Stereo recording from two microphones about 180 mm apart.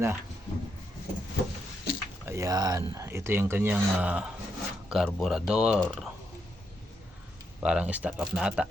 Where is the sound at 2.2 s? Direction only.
15° right (ahead or behind); by 6.1 s 5° left (ahead or behind).